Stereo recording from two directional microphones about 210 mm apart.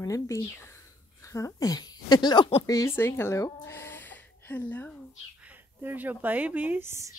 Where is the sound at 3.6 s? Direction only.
10° left (ahead or behind).